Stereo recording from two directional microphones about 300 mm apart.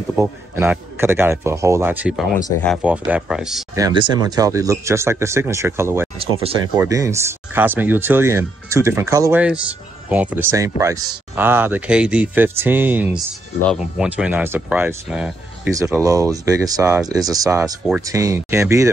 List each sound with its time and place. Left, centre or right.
0.1 s speech: centre
3.8 s speech: centre